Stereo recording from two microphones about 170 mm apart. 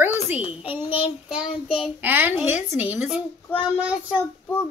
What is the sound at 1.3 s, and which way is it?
A child's voice, 5° right (ahead or behind).